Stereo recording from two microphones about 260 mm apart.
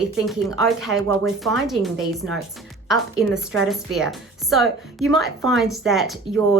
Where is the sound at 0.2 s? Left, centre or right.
Centre.